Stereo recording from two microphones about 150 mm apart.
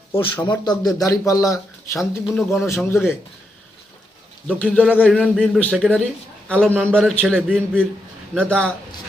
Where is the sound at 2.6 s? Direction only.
20° left (ahead or behind).